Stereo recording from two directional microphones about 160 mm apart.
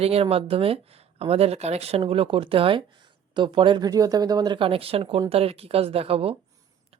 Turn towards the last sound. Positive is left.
turn(degrees=-35)  # may be behind; listen again after turning